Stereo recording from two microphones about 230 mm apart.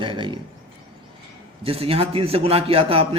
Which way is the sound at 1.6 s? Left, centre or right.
Right.